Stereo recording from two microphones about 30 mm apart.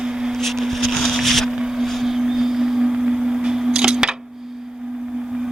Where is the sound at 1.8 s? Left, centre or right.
Centre.